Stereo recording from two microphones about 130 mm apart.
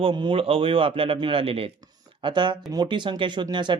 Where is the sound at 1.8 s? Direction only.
35° right (ahead or behind).